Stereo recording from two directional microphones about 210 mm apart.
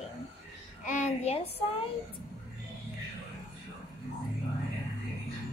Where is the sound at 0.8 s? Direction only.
35° left (ahead or behind).